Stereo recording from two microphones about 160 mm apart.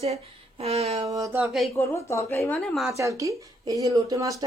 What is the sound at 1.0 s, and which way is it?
Speech, 20° right (ahead or behind).